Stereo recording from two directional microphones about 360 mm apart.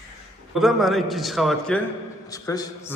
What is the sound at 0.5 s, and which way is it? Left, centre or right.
A man's voice, centre.